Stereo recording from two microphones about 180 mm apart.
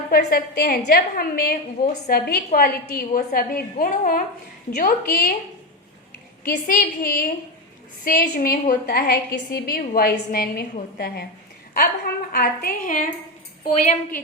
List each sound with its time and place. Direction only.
0.1 s a woman's voice: 55° left (ahead or behind)
6.4 s a woman's voice: 50° left (ahead or behind)